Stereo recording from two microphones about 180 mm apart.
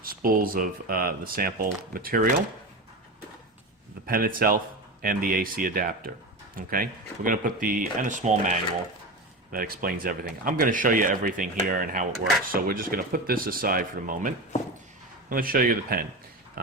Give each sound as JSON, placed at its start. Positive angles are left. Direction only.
{"t": 0.0, "sound": "speech", "side_deg": -50}
{"t": 4.0, "sound": "speech", "side_deg": -55}
{"t": 9.5, "sound": "speech", "side_deg": -55}